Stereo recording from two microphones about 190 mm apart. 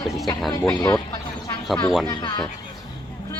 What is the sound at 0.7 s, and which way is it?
Speech, 15° left (ahead or behind).